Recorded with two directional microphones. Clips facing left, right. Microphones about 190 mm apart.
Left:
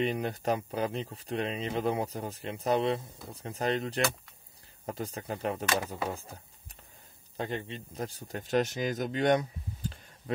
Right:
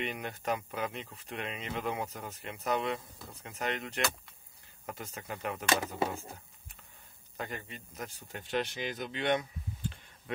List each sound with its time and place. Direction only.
0.0 s speech: 35° left (ahead or behind)
7.3 s speech: 30° left (ahead or behind)